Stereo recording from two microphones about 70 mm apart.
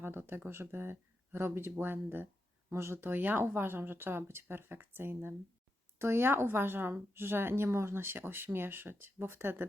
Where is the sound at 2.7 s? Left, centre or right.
Right.